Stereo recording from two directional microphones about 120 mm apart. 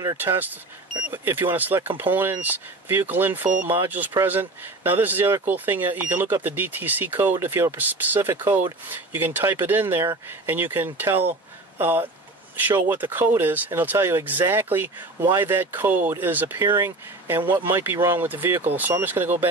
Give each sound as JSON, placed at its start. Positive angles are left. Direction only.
{"t": 0.2, "sound": "speech", "side_deg": -15}